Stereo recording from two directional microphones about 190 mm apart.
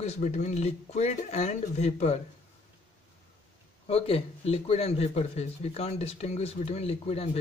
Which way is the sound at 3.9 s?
30° left (ahead or behind).